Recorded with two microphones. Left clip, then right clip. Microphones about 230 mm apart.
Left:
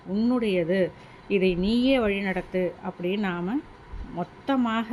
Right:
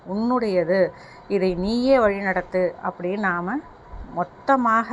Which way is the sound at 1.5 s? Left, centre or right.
Centre.